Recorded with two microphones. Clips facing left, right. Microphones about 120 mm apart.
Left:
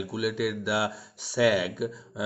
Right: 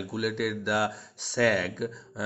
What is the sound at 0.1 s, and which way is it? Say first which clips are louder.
Speech: even; 5° left (ahead or behind).